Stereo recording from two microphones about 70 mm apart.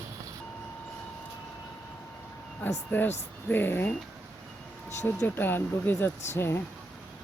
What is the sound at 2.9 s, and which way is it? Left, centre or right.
Speech, left.